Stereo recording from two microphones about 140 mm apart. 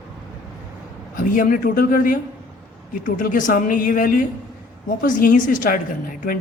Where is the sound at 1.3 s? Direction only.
75° left (ahead or behind).